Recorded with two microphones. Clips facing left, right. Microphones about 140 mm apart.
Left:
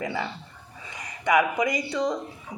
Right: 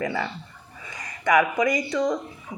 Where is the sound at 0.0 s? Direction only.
15° left (ahead or behind).